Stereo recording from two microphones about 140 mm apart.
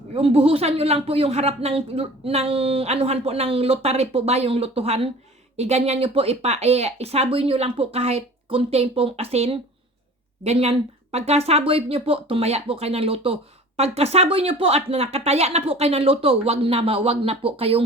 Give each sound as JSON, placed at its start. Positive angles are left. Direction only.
{"t": 0.1, "sound": "speech", "side_deg": -45}